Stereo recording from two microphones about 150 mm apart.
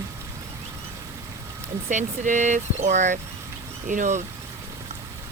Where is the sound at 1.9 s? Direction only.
55° right (ahead or behind).